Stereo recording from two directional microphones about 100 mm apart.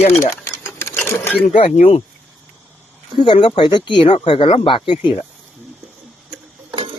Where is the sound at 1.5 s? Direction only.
75° left (ahead or behind).